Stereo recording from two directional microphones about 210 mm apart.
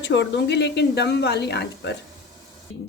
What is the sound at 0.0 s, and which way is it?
Speech, 55° left (ahead or behind).